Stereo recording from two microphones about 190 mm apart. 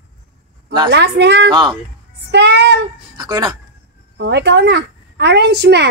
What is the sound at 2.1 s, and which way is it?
Speech, 65° right (ahead or behind).